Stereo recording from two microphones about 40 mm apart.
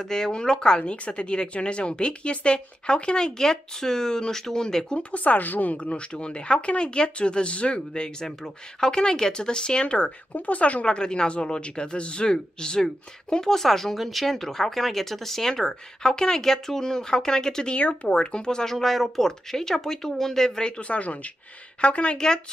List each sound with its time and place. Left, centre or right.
0.0 s a woman's voice: centre
4.9 s a woman's voice: left
5.8 s a woman's voice: left
10.3 s a woman's voice: left; by 17.7 s centre
17.7 s a woman's voice: left